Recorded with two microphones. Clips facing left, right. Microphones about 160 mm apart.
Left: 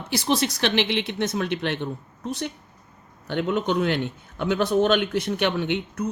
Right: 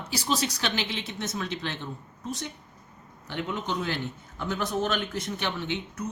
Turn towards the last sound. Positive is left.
turn(degrees=65)  # may be behind; listen again after turning